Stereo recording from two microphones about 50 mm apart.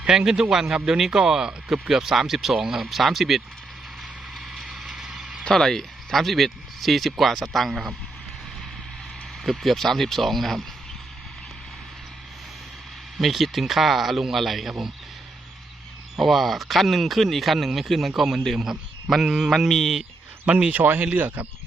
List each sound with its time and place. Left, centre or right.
0.0 s speech: centre
4.4 s a sound: centre
5.5 s speech: centre
9.4 s speech: centre
13.1 s speech: centre
16.1 s speech: centre
19.5 s speech: centre
20.4 s speech: right